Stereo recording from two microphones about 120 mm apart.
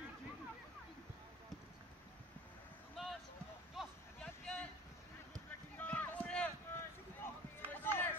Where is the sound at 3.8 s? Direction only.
5° left (ahead or behind).